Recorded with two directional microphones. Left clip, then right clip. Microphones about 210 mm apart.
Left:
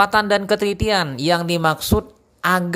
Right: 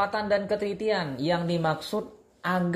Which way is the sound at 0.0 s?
30° left (ahead or behind).